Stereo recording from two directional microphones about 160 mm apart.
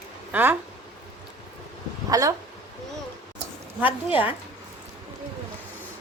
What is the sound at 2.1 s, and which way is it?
Speech, 20° right (ahead or behind).